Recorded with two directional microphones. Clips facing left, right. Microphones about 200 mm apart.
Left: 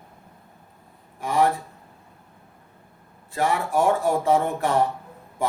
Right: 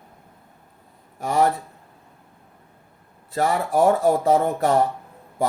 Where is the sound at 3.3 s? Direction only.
40° right (ahead or behind).